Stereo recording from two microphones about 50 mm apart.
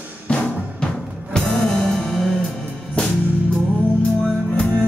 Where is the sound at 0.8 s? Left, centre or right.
Centre.